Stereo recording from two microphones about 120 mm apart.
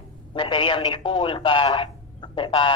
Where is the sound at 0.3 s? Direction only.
45° left (ahead or behind).